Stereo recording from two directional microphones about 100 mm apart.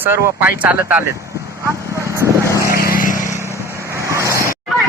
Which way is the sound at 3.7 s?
30° right (ahead or behind).